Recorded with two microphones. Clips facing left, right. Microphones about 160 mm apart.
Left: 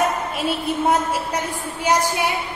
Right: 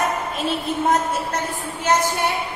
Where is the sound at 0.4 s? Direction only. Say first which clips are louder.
Left 1 dB; 10° left (ahead or behind).